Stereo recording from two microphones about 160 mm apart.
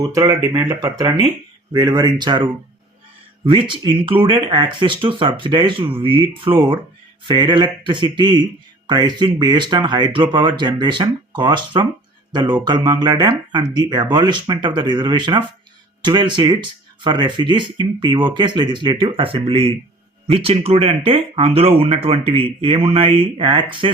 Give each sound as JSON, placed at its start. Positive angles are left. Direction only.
{"t": 0.0, "sound": "speech", "side_deg": -25}
{"t": 7.3, "sound": "speech", "side_deg": -30}